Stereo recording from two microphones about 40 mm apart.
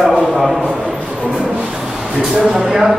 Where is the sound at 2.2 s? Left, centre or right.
Centre.